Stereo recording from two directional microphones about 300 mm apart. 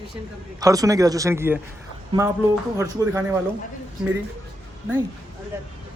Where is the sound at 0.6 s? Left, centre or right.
Centre.